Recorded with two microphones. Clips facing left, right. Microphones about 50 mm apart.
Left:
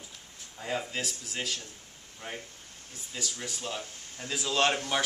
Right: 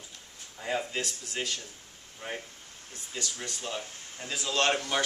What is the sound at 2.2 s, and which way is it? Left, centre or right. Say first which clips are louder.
Speech: right 2 dB; centre.